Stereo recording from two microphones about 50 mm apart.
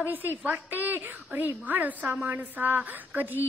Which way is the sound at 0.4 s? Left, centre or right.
Right.